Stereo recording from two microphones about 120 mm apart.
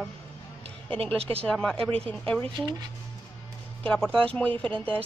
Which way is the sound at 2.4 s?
40° right (ahead or behind).